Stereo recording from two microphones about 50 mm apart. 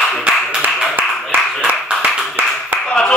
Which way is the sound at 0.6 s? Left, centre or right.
Right.